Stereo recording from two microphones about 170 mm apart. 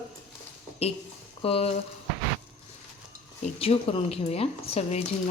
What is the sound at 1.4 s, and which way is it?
Speech, 35° left (ahead or behind).